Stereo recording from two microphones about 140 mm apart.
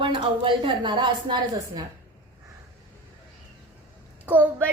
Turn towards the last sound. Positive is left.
turn(degrees=-15)  # may be behind; listen again after turning